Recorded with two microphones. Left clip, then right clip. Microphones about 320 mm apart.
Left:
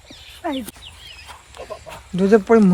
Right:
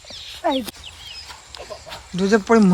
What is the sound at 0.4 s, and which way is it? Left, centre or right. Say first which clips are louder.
Speech: right 5 dB; centre.